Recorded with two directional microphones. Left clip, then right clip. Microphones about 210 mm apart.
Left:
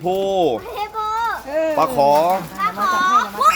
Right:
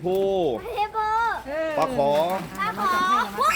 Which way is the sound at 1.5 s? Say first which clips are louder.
Left 7 dB; 30° left (ahead or behind).